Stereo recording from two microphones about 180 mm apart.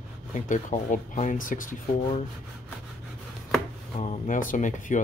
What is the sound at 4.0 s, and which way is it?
Speech, 45° left (ahead or behind).